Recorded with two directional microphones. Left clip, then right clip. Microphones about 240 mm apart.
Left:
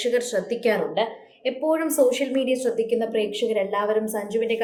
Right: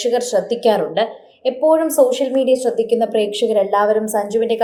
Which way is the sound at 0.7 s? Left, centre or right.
Right.